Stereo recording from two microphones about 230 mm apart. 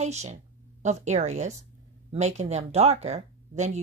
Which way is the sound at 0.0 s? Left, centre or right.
Right.